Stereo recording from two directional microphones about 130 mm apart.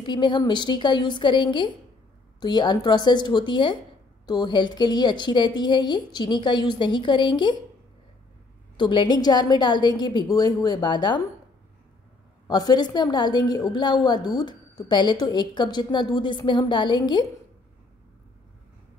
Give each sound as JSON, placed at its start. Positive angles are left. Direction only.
{"t": 0.0, "sound": "a woman's voice", "side_deg": 35}
{"t": 8.7, "sound": "a woman's voice", "side_deg": 35}
{"t": 12.4, "sound": "a woman's voice", "side_deg": 30}